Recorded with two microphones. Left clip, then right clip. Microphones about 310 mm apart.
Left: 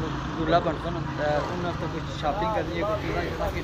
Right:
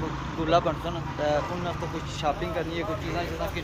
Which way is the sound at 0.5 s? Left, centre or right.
Centre.